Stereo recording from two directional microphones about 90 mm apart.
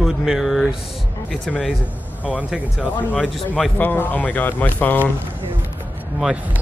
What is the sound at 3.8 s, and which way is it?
Speech, 20° left (ahead or behind).